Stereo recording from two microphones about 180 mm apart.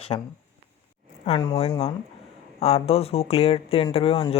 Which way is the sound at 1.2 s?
30° left (ahead or behind).